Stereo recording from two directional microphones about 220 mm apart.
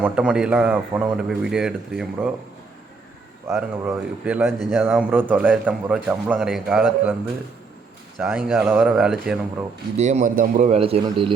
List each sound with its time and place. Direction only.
0.0 s a man's voice: 5° right (ahead or behind)
3.5 s a man's voice: 5° right (ahead or behind)
8.2 s a man's voice: centre (ahead or behind)
10.0 s a man's voice: 30° right (ahead or behind)